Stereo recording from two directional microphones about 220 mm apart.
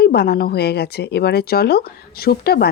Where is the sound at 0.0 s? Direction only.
45° left (ahead or behind).